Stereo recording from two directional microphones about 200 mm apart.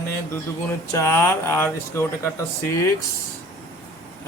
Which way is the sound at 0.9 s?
15° left (ahead or behind).